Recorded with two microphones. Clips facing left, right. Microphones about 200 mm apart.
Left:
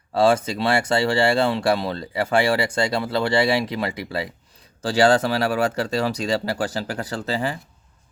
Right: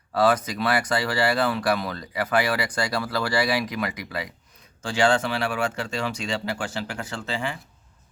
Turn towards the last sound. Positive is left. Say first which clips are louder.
# left 5 dB
turn(degrees=35)  # may be behind; listen again after turning